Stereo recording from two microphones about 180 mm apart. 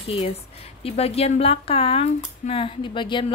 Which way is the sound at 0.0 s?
35° left (ahead or behind).